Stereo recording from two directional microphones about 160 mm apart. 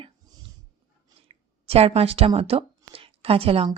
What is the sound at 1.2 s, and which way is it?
Speech, 40° right (ahead or behind).